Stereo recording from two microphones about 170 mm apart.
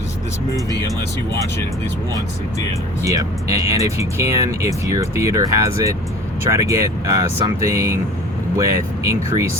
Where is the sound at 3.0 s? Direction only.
20° right (ahead or behind).